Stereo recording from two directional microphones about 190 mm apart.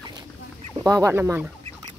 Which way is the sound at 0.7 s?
15° right (ahead or behind).